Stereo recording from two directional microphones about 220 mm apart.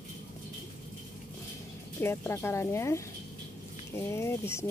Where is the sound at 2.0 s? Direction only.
10° left (ahead or behind).